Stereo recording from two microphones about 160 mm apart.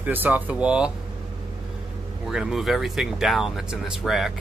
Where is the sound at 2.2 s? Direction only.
5° right (ahead or behind).